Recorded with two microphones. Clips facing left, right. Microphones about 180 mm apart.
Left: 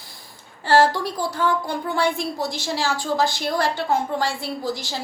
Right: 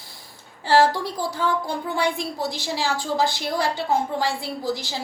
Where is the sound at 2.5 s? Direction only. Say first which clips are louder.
Left 1 dB; 15° right (ahead or behind).